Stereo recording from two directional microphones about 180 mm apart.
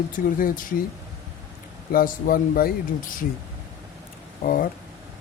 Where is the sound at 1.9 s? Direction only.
50° left (ahead or behind).